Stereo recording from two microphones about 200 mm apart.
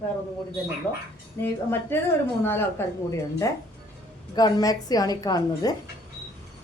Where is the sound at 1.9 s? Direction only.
10° left (ahead or behind).